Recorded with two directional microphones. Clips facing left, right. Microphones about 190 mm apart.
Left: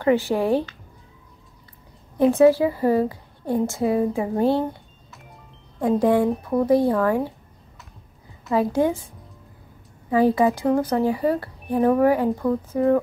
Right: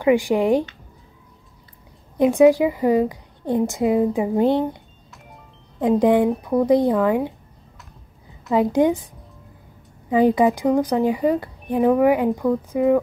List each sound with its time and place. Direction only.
0.0 s a woman's voice: 15° right (ahead or behind)
2.1 s a woman's voice: 15° right (ahead or behind)
8.5 s a woman's voice: 20° right (ahead or behind)